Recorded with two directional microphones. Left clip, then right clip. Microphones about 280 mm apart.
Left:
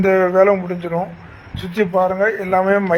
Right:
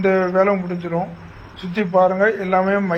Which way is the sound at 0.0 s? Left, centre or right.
Left.